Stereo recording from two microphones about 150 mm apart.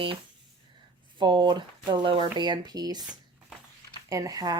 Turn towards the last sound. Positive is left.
turn(degrees=-25)  # may be behind; listen again after turning